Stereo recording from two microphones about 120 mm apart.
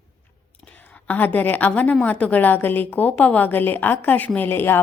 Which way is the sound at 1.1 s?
15° left (ahead or behind).